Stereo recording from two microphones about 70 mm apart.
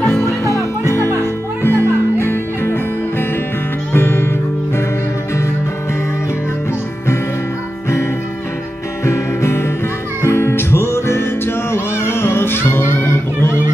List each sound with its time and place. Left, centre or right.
0.2 s music: left
1.2 s music: left
9.0 s music: left